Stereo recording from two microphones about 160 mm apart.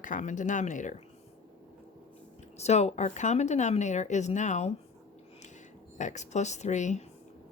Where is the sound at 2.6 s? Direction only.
45° left (ahead or behind).